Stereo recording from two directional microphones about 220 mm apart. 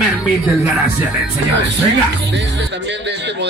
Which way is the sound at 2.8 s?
50° right (ahead or behind).